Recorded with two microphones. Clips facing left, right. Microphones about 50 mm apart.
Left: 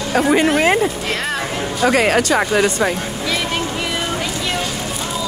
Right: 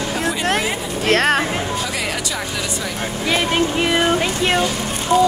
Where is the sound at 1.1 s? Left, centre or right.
Right.